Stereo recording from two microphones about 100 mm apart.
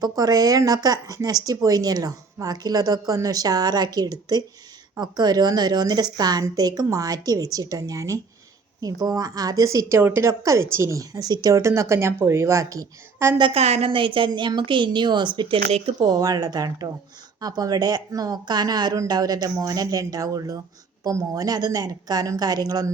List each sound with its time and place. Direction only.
0.0 s a woman's voice: 40° right (ahead or behind)
13.4 s a woman's voice: 80° right; by 16.0 s 65° right (ahead or behind)
16.2 s speech: 40° right (ahead or behind)